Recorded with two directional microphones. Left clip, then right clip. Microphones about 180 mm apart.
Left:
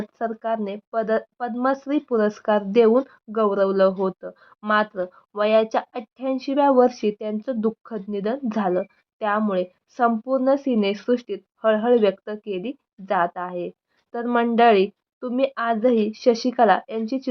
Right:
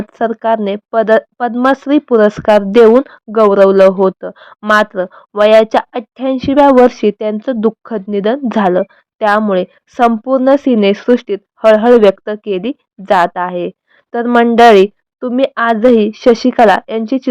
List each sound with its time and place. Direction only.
0.2 s speech: 45° right (ahead or behind)